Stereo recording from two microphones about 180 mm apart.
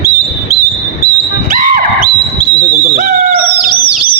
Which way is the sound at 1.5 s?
50° right (ahead or behind).